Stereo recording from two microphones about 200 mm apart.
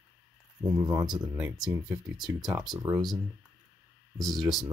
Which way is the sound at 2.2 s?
20° right (ahead or behind).